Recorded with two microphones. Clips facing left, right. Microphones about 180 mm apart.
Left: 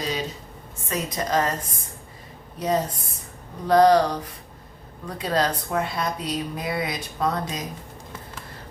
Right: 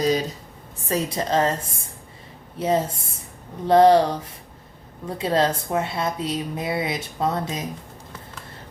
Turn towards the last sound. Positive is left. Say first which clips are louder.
# right 1 dB
turn(degrees=-25)  # may be behind; listen again after turning